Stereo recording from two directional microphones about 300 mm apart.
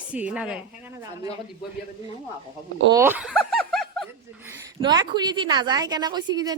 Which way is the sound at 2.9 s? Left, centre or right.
Centre.